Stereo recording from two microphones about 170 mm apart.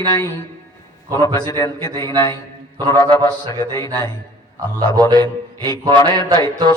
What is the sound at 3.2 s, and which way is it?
Speech, 20° left (ahead or behind).